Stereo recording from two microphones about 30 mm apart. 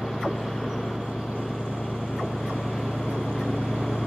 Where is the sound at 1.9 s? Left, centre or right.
Right.